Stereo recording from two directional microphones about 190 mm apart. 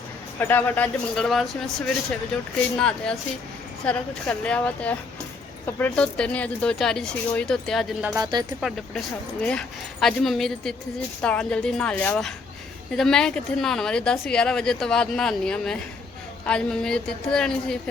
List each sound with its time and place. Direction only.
0.3 s a woman's voice: 10° left (ahead or behind)
8.1 s speech: 20° right (ahead or behind)
9.4 s speech: 5° left (ahead or behind)